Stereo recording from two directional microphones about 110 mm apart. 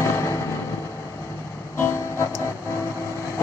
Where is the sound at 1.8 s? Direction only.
25° left (ahead or behind).